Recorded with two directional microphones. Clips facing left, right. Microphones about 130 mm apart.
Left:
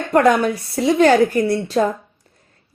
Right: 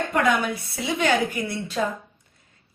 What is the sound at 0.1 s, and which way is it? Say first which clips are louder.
A woman's voice: left 10 dB; 40° left (ahead or behind).